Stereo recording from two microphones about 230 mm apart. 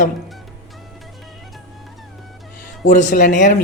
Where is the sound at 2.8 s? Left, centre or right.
Left.